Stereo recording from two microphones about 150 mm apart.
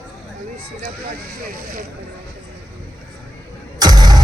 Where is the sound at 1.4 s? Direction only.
75° right (ahead or behind).